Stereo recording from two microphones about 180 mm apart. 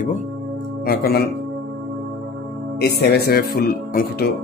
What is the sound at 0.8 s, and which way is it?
Speech, 60° left (ahead or behind).